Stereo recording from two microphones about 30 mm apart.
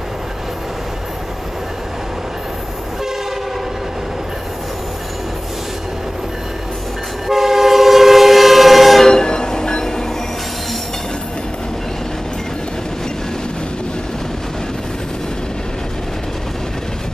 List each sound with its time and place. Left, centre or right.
7.2 s train: centre
9.0 s train: left